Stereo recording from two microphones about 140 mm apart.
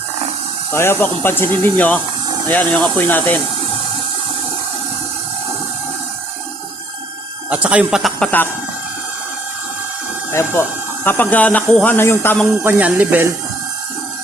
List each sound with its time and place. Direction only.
0.7 s speech: 15° left (ahead or behind)
7.5 s speech: 10° right (ahead or behind)
10.3 s speech: 20° left (ahead or behind)
12.6 s speech: 10° right (ahead or behind)